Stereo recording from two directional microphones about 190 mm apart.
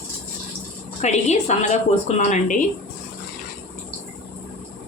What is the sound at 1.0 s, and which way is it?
A woman's voice, 35° left (ahead or behind).